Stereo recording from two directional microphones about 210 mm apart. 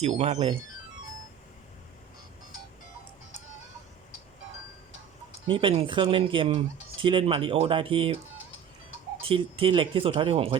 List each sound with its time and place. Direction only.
0.0 s speech: 30° right (ahead or behind)
5.5 s speech: 25° right (ahead or behind)
9.2 s speech: 25° right (ahead or behind)